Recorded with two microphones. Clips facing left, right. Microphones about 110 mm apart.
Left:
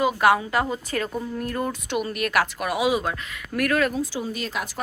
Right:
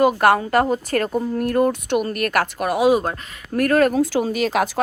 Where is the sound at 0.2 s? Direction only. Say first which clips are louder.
Right 4 dB; 50° right (ahead or behind).